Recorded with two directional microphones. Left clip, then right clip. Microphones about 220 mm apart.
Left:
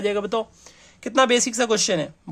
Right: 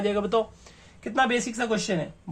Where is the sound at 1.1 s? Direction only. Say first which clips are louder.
Left 6 dB; 50° left (ahead or behind).